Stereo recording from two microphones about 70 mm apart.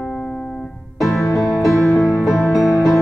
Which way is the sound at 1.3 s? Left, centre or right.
Centre.